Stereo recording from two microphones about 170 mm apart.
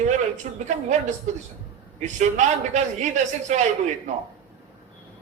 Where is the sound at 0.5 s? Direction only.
45° right (ahead or behind).